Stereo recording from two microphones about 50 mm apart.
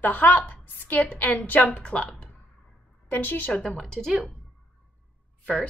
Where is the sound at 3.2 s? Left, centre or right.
Left.